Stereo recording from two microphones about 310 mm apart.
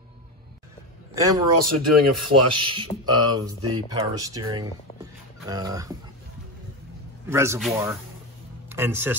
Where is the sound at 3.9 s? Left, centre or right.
Centre.